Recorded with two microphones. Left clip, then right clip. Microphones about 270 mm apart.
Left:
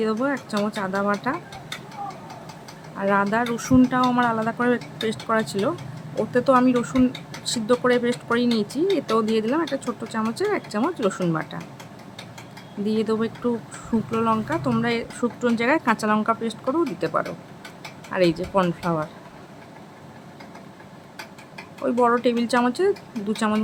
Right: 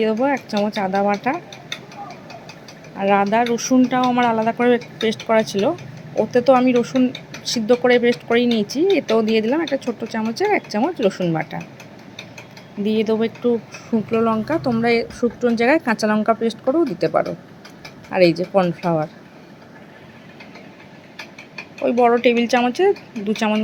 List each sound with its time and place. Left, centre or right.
0.0 s speech: centre
3.0 s speech: centre
12.8 s speech: centre
21.8 s speech: centre